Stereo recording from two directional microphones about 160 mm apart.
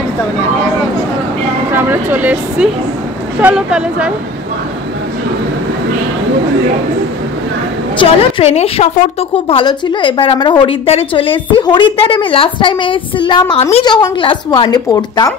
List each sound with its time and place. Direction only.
1.7 s speech: 15° right (ahead or behind)
8.0 s a woman's voice: 40° left (ahead or behind)
13.8 s a woman's voice: 30° left (ahead or behind)